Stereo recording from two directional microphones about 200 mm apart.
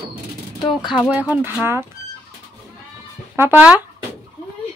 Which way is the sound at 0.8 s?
5° right (ahead or behind).